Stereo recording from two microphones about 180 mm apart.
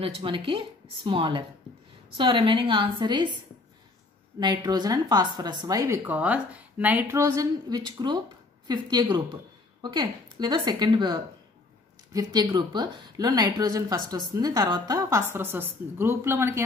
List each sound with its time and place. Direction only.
0.0 s a woman's voice: 30° right (ahead or behind)
4.4 s a woman's voice: 25° right (ahead or behind)
6.0 s a woman's voice: 10° right (ahead or behind)